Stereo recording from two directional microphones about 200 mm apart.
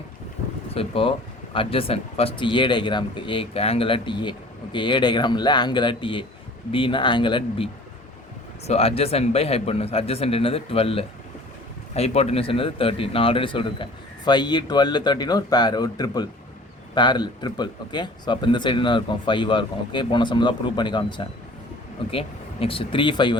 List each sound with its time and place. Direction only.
0.7 s speech: 30° left (ahead or behind)